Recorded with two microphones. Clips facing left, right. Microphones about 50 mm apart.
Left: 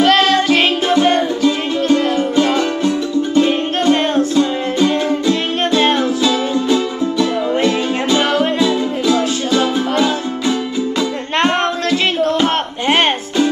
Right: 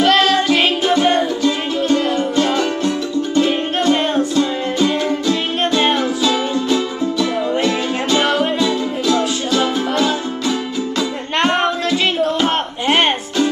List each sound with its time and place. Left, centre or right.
0.0 s music: centre
8.6 s music: centre
9.9 s music: centre